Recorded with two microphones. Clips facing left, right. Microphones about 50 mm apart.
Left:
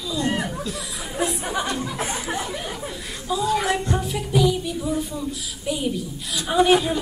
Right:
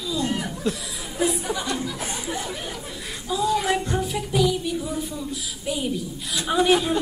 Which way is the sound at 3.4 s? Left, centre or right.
Left.